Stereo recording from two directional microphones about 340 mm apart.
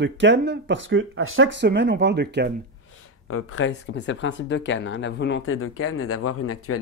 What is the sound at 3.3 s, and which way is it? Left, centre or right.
Speech, left.